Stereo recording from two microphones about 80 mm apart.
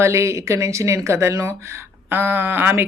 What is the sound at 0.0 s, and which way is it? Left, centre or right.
A woman's voice, right.